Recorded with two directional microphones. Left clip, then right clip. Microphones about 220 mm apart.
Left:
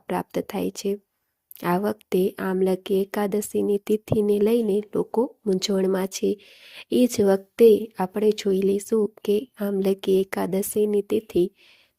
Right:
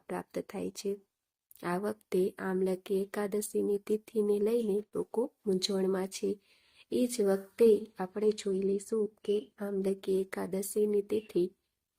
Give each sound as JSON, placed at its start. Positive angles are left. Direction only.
{"t": 0.1, "sound": "speech", "side_deg": 35}